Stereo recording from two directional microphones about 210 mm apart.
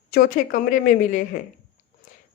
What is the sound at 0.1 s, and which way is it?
Speech, 40° left (ahead or behind).